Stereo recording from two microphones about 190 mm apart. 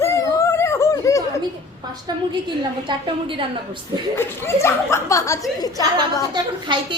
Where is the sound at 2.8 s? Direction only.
25° right (ahead or behind).